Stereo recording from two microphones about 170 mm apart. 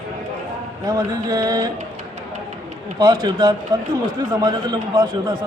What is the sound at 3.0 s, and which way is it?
A man's voice, 25° right (ahead or behind).